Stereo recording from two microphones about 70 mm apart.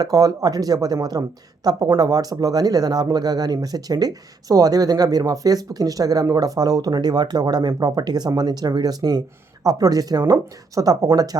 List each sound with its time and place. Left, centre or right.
0.0 s speech: right
1.7 s speech: right
2.0 s speech: right
10.8 s speech: right